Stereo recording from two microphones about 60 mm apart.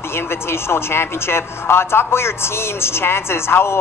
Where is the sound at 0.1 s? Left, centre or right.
Left.